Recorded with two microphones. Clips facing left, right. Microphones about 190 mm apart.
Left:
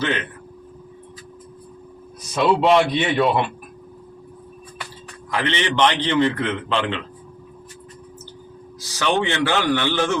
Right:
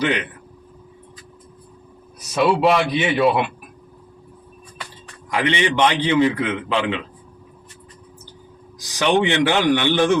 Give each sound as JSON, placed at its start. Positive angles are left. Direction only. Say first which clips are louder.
{"t": 0.0, "sound": "a man's voice", "louder": "right 2 dB", "side_deg": -15}
{"t": 2.3, "sound": "a man's voice", "louder": "left 1 dB", "side_deg": -5}
{"t": 5.3, "sound": "a man's voice", "louder": "right 3 dB", "side_deg": -15}
{"t": 8.8, "sound": "a man's voice", "louder": "right 3 dB", "side_deg": -15}